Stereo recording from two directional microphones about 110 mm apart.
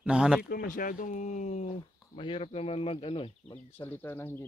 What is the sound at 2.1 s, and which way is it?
Speech, 50° left (ahead or behind).